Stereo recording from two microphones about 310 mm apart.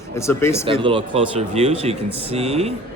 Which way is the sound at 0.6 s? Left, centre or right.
Centre.